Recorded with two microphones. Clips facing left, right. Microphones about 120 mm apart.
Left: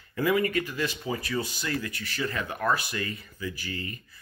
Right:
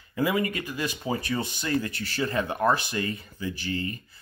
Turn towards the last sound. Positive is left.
turn(degrees=-30)  # may be behind; listen again after turning